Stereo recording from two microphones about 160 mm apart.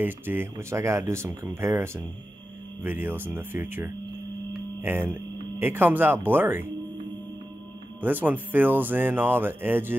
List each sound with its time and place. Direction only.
0.0 s speech: 10° right (ahead or behind)
4.9 s speech: 15° right (ahead or behind)
8.0 s speech: 10° right (ahead or behind)